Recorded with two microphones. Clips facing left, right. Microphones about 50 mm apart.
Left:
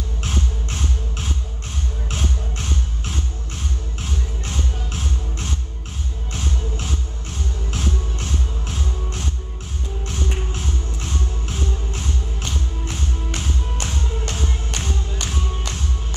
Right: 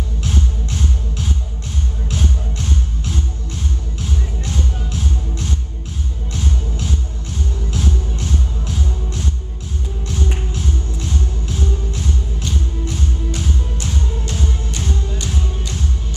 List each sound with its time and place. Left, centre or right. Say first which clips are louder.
0.2 s music: right 2 dB; left
7.7 s music: right 3 dB; left
10.5 s music: right 4 dB; left